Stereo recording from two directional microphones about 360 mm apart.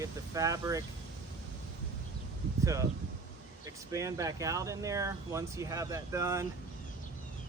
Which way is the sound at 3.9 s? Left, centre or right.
Centre.